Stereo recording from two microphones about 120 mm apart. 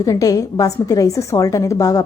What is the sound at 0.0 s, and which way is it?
A woman's voice, 30° left (ahead or behind).